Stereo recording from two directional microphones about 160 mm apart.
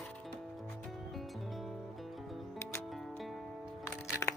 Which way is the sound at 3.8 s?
20° left (ahead or behind).